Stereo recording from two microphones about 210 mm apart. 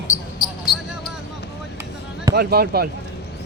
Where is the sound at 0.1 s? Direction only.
35° left (ahead or behind).